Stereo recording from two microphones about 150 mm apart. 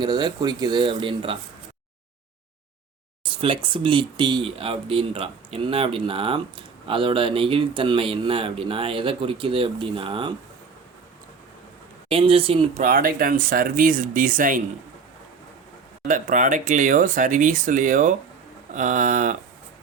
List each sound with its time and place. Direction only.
0.0 s speech: 30° right (ahead or behind)
3.2 s speech: 35° right (ahead or behind)
12.1 s speech: 35° right (ahead or behind)
12.8 s speech: 70° right (ahead or behind)
16.0 s speech: 60° right (ahead or behind)